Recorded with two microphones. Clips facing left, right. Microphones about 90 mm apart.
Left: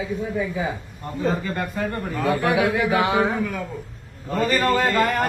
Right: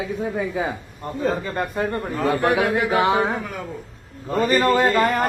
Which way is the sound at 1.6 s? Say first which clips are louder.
Right 2 dB; 30° right (ahead or behind).